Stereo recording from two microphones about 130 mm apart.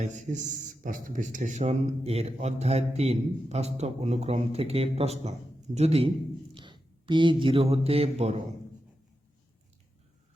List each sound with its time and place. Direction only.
0.0 s a man's voice: 65° right (ahead or behind)
6.5 s speech: 40° right (ahead or behind)